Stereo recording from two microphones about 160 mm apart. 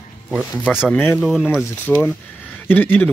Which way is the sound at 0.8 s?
10° left (ahead or behind).